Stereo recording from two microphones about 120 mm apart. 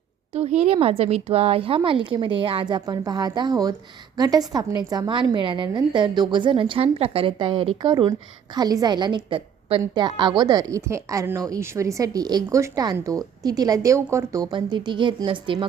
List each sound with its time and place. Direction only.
0.3 s a woman's voice: 65° right (ahead or behind); by 14.4 s 25° right (ahead or behind)
14.5 s a woman's voice: 40° right (ahead or behind)